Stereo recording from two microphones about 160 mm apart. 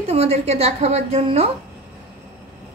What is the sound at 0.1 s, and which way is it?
A woman's voice, 40° right (ahead or behind).